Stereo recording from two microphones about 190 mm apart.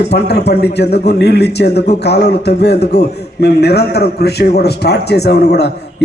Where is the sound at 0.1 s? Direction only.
60° left (ahead or behind).